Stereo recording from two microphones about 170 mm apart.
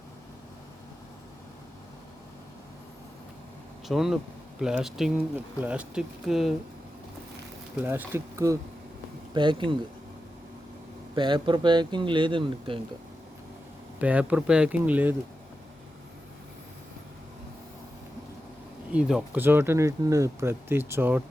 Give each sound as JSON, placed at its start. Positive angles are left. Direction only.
{"t": 3.8, "sound": "speech", "side_deg": 0}
{"t": 7.8, "sound": "speech", "side_deg": -15}
{"t": 9.3, "sound": "speech", "side_deg": -30}
{"t": 11.1, "sound": "speech", "side_deg": -25}
{"t": 14.0, "sound": "speech", "side_deg": -10}
{"t": 18.9, "sound": "speech", "side_deg": -5}